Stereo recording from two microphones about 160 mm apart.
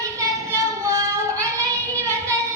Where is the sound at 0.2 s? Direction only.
20° right (ahead or behind).